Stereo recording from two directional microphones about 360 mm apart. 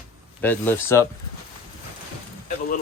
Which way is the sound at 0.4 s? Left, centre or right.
Centre.